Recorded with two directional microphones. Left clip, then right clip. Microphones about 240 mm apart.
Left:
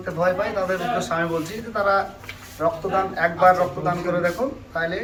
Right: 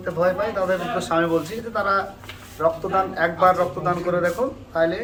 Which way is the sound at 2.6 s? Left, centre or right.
Right.